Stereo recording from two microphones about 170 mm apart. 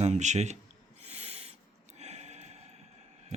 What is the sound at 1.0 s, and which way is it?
Snort, 35° right (ahead or behind).